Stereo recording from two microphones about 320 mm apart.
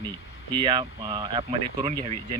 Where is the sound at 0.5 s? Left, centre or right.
Centre.